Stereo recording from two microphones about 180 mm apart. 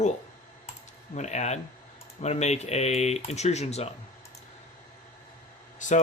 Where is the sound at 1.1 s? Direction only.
40° left (ahead or behind).